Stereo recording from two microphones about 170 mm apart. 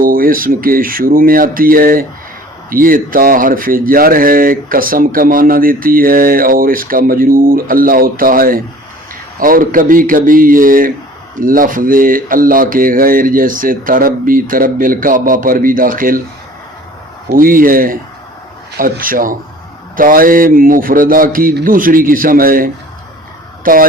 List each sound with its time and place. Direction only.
0.0 s speech: 55° right (ahead or behind)
17.2 s speech: 55° right (ahead or behind)